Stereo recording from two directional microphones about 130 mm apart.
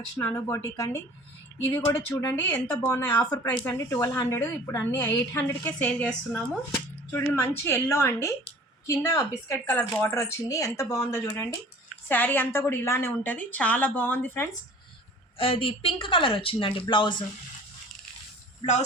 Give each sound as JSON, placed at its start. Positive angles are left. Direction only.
{"t": 0.2, "sound": "speech", "side_deg": 20}
{"t": 2.4, "sound": "a woman's voice", "side_deg": 15}
{"t": 7.1, "sound": "speech", "side_deg": 15}
{"t": 12.0, "sound": "a woman's voice", "side_deg": 15}
{"t": 15.4, "sound": "speech", "side_deg": 45}